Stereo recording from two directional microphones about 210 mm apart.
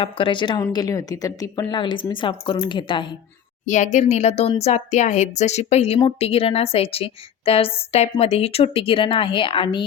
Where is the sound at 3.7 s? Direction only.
35° left (ahead or behind).